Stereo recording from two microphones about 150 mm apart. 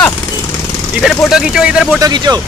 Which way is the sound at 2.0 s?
25° right (ahead or behind).